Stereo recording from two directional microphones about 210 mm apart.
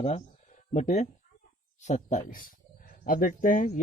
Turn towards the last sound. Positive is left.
turn(degrees=40)  # may be behind; listen again after turning